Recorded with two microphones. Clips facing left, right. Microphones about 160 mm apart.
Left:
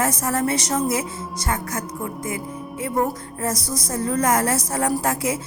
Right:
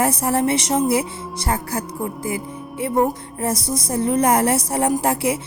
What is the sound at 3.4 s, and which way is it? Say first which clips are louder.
A woman's voice: right 3 dB; 30° right (ahead or behind).